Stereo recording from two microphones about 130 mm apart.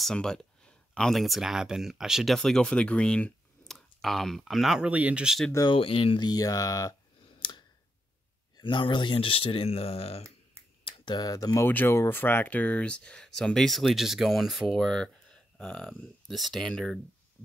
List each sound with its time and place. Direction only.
0.0 s speech: 5° left (ahead or behind)
5.7 s speech: 45° left (ahead or behind)
10.9 s speech: 35° left (ahead or behind); by 17.0 s 5° left (ahead or behind)